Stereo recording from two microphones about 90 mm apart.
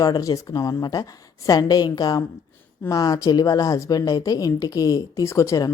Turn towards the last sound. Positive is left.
turn(degrees=35)  # may be behind; listen again after turning